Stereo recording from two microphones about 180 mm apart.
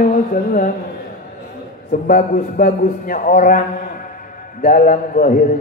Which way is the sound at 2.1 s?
50° left (ahead or behind).